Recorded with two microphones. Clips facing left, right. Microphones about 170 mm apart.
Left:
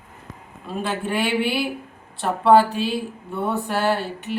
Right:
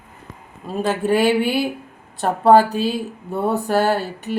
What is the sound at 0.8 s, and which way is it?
A woman's voice, 40° right (ahead or behind).